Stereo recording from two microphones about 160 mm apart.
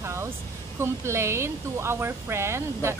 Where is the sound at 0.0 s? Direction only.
15° right (ahead or behind).